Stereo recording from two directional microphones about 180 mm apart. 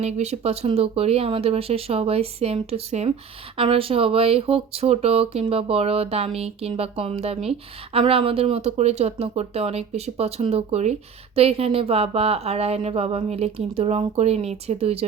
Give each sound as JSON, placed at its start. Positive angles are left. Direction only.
{"t": 0.0, "sound": "speech", "side_deg": -35}